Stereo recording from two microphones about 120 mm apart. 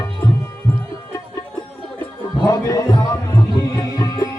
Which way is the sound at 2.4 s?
30° left (ahead or behind).